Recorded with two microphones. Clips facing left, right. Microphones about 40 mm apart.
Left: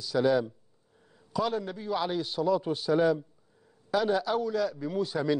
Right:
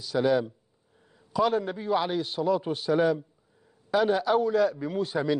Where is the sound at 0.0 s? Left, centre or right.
Centre.